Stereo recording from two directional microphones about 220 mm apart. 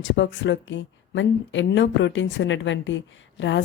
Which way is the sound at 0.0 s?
55° left (ahead or behind).